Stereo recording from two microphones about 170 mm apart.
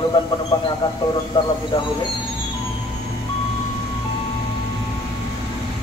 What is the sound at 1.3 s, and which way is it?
Speech, 30° left (ahead or behind).